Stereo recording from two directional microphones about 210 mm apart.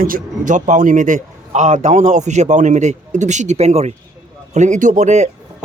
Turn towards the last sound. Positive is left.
turn(degrees=-35)  # may be behind; listen again after turning